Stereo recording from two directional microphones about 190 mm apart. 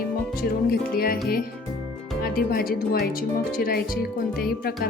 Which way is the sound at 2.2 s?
50° left (ahead or behind).